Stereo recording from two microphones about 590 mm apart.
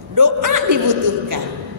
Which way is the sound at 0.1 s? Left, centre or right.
Right.